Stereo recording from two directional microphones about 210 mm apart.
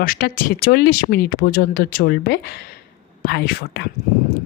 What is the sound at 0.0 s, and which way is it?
Speech, 45° left (ahead or behind).